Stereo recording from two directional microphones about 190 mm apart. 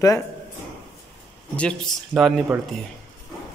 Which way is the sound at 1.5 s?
5° left (ahead or behind).